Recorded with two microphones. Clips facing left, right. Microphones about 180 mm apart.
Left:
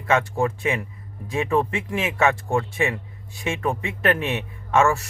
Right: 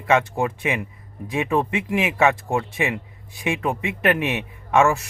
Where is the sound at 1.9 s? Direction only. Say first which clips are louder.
Right 2 dB; 15° right (ahead or behind).